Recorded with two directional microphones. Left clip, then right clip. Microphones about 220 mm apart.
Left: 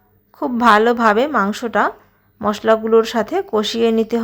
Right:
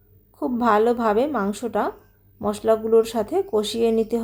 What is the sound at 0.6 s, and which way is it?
A woman's voice, 5° left (ahead or behind).